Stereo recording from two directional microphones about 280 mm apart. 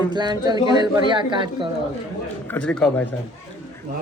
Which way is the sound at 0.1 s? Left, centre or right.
Centre.